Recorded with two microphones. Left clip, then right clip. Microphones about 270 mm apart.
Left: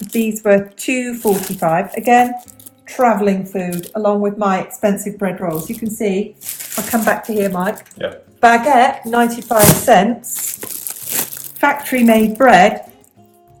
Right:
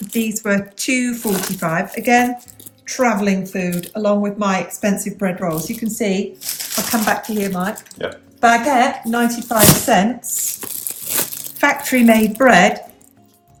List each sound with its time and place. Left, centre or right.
0.0 s speech: centre
6.9 s speech: centre
8.4 s speech: left
10.6 s a sound: centre
11.6 s speech: centre